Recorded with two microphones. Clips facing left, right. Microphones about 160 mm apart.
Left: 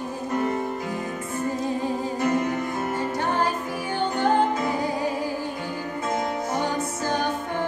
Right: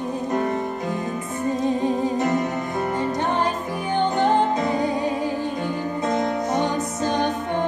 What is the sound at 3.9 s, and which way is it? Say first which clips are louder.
Music: right 3 dB; 20° right (ahead or behind).